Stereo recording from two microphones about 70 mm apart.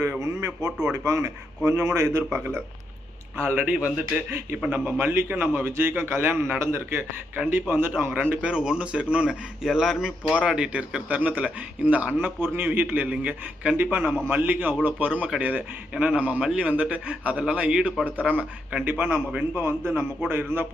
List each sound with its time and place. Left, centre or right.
0.2 s a man's voice: right
3.5 s a man's voice: right
4.3 s a man's voice: right; by 9.3 s centre
9.6 s a man's voice: centre
16.4 s a man's voice: centre; by 20.7 s right